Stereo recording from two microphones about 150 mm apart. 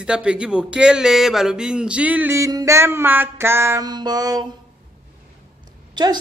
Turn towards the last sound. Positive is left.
turn(degrees=-30)  # may be behind; listen again after turning